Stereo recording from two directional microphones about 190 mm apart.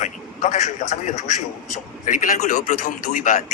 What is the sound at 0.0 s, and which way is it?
A man's voice, 40° left (ahead or behind).